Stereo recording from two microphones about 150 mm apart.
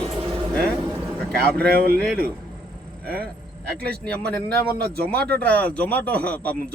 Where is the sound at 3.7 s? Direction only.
90° right.